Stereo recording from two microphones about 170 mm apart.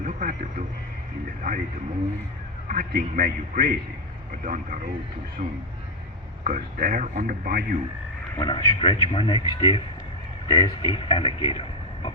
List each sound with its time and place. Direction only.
0.0 s radio: 50° right (ahead or behind)
2.6 s a man's voice: 55° right (ahead or behind)
8.4 s speech: 25° left (ahead or behind)